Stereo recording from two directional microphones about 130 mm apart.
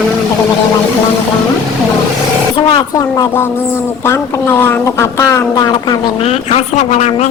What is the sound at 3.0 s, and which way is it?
Speech, 25° left (ahead or behind).